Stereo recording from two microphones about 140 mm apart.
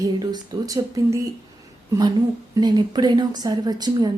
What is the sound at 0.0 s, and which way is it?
A woman's voice, 30° right (ahead or behind).